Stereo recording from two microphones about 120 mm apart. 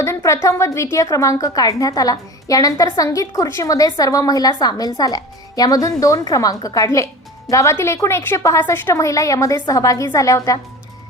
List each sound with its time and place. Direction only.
0.0 s a woman's voice: 25° left (ahead or behind)